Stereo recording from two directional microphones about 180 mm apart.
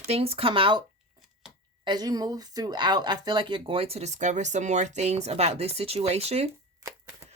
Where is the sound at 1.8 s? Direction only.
20° right (ahead or behind).